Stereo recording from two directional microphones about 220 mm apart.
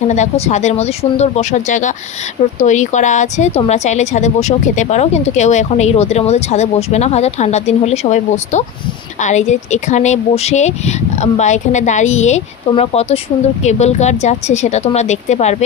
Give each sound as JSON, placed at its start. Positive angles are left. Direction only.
{"t": 0.1, "sound": "speech", "side_deg": 30}